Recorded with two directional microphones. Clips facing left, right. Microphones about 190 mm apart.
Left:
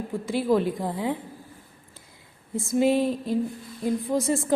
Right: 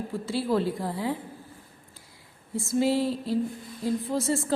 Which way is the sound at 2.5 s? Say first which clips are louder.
Left 3 dB; 15° left (ahead or behind).